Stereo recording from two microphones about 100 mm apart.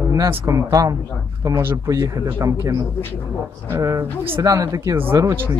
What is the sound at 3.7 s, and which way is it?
Speech, 35° right (ahead or behind).